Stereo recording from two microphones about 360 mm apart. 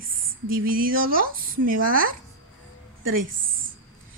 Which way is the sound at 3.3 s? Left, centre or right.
Right.